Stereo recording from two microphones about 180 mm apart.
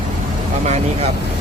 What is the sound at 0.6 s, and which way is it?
Speech, 40° right (ahead or behind).